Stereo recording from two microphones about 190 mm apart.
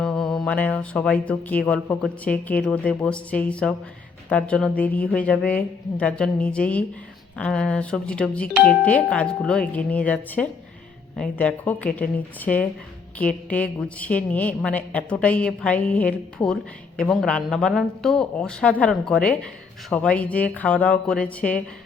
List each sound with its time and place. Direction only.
0.0 s speech: centre (ahead or behind)
17.0 s speech: 5° left (ahead or behind)